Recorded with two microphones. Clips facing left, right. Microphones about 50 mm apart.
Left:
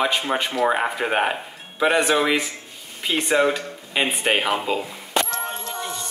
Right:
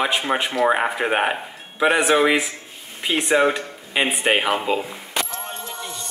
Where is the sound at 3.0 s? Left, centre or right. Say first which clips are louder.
Right 1 dB; centre.